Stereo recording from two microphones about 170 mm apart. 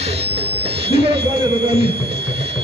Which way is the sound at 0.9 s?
35° right (ahead or behind).